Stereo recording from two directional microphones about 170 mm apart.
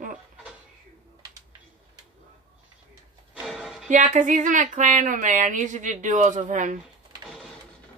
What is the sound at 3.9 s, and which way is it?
Speech, 45° right (ahead or behind).